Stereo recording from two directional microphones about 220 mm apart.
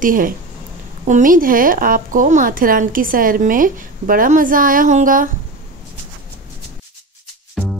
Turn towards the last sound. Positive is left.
turn(degrees=0)  # may be behind; listen again after turning